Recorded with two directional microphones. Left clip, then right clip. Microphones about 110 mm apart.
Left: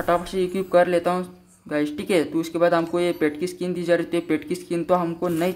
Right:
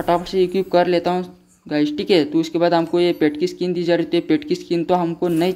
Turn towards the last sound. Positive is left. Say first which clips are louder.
# right 3 dB
turn(degrees=0)  # may be behind; listen again after turning